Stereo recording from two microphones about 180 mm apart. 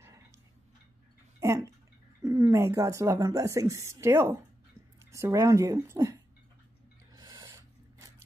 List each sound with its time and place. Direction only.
1.4 s bathtub: 15° right (ahead or behind)
2.2 s speech: 20° right (ahead or behind)
7.1 s filing: 25° right (ahead or behind)